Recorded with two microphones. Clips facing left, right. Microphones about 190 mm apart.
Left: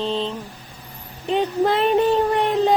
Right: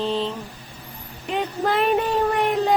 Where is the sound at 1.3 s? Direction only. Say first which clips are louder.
Left 4 dB; 25° left (ahead or behind).